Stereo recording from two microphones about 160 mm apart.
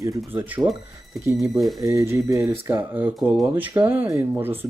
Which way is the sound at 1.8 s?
20° right (ahead or behind).